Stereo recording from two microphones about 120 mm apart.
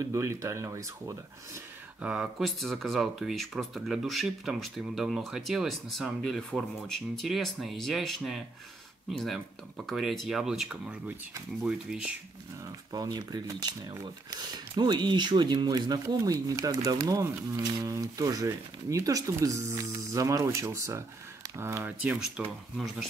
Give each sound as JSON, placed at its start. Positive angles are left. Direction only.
{"t": 0.0, "sound": "speech", "side_deg": -25}
{"t": 2.0, "sound": "speech", "side_deg": -10}
{"t": 2.4, "sound": "speech", "side_deg": 0}
{"t": 12.9, "sound": "speech", "side_deg": -35}